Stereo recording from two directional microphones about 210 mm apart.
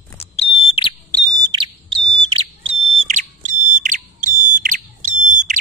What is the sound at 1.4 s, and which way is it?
Bird, 20° right (ahead or behind).